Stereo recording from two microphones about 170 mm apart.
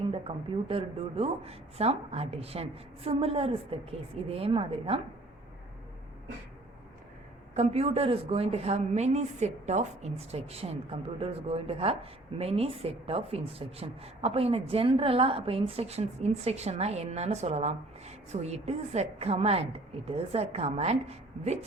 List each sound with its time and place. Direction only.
0.1 s a woman's voice: 35° right (ahead or behind)
7.5 s a woman's voice: 40° right (ahead or behind)